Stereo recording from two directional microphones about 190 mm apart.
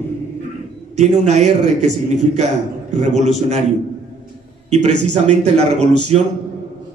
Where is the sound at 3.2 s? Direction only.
35° right (ahead or behind).